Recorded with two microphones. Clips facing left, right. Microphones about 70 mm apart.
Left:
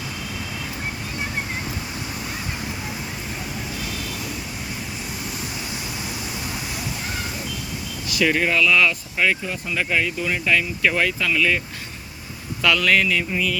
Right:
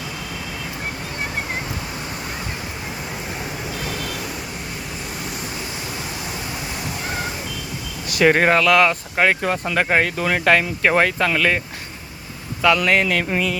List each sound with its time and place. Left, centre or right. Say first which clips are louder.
8.0 s speech: right 5 dB; right
9.4 s speech: right 6 dB; right
12.6 s speech: right 2 dB; right
13.1 s speech: right 2 dB; right